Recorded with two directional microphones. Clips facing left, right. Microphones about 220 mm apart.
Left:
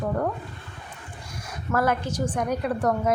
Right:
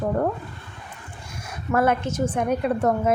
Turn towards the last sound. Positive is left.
turn(degrees=-25)  # may be behind; listen again after turning